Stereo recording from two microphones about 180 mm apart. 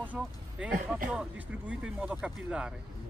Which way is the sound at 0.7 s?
50° right (ahead or behind).